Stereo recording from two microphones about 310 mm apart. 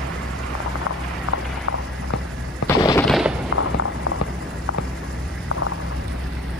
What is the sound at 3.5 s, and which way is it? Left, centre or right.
Music, left.